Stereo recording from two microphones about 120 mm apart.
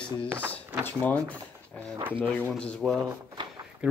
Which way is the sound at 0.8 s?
15° left (ahead or behind).